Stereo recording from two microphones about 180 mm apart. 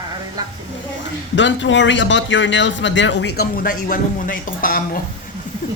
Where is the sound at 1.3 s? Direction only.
90° left; by 5.0 s 50° left (ahead or behind).